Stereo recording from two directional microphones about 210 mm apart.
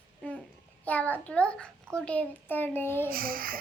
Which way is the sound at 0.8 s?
5° left (ahead or behind).